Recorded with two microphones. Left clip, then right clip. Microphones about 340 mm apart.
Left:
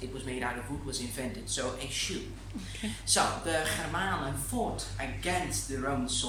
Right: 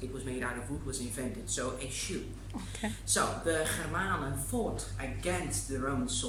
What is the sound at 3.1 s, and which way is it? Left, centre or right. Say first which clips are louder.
Speech: left 3 dB; centre.